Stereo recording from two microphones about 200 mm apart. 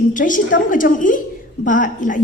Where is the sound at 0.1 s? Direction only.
40° left (ahead or behind).